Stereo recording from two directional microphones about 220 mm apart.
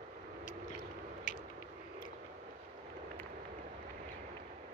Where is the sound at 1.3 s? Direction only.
35° left (ahead or behind).